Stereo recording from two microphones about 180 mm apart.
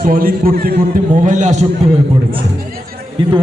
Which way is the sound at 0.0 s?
50° right (ahead or behind).